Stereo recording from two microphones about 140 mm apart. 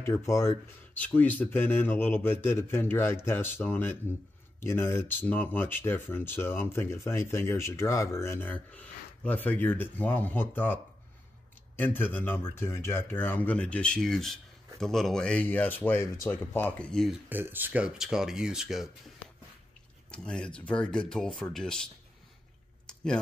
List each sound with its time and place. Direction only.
0.0 s speech: 20° left (ahead or behind); by 17.2 s 5° left (ahead or behind)
17.3 s speech: 15° right (ahead or behind)
20.1 s speech: 5° left (ahead or behind)